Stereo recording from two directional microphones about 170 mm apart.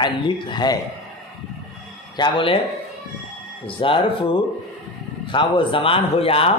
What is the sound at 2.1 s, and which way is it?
Speech, 30° left (ahead or behind).